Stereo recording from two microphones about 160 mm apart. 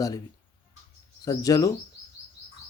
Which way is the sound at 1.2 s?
20° left (ahead or behind).